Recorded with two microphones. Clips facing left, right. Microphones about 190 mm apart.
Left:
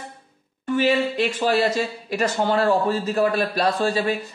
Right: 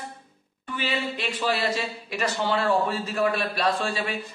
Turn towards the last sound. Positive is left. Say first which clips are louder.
# left 5 dB
turn(degrees=40)  # may be behind; listen again after turning